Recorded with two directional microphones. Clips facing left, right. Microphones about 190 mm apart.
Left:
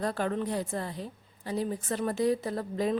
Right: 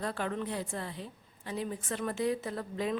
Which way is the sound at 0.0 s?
40° left (ahead or behind).